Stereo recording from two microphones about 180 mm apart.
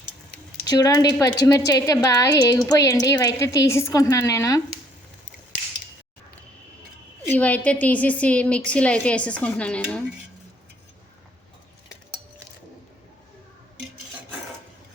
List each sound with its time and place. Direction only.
0.7 s a woman's voice: 20° left (ahead or behind)
7.3 s a woman's voice: 10° left (ahead or behind)